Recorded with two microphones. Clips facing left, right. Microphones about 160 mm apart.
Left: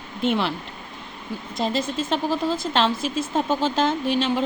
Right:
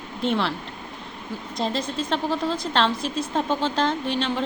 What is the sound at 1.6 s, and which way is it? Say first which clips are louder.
Speech: left 2 dB; 5° left (ahead or behind).